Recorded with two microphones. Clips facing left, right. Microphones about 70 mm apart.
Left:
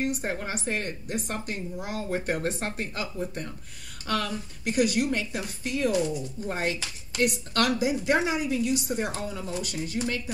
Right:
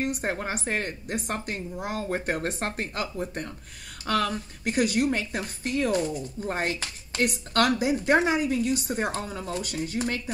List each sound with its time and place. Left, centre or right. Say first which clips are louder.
0.0 s speech: right 1 dB; right